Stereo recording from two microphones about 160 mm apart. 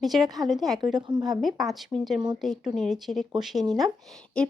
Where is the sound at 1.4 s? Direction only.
Centre (ahead or behind).